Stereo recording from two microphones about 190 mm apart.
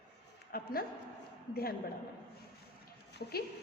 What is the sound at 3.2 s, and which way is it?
Speech, 60° left (ahead or behind).